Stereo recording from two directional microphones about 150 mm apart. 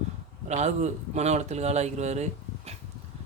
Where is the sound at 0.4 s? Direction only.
50° right (ahead or behind).